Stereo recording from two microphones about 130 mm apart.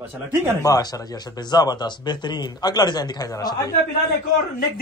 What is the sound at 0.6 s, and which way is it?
A man's voice, 30° left (ahead or behind).